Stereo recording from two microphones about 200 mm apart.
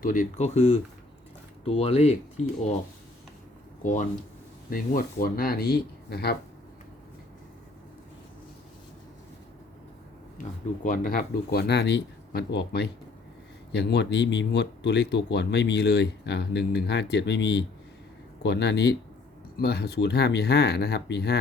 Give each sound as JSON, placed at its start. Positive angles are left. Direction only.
{"t": 0.0, "sound": "speech", "side_deg": 40}
{"t": 4.7, "sound": "speech", "side_deg": 45}
{"t": 10.8, "sound": "speech", "side_deg": 40}